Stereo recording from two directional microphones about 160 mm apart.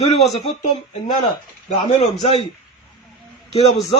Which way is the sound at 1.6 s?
45° left (ahead or behind).